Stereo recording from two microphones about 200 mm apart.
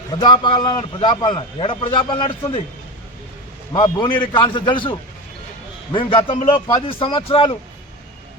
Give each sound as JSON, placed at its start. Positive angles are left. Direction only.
{"t": 0.1, "sound": "a man's voice", "side_deg": 25}
{"t": 3.7, "sound": "a man's voice", "side_deg": 20}